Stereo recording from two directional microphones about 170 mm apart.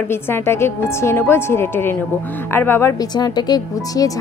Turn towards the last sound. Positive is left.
turn(degrees=25)  # may be behind; listen again after turning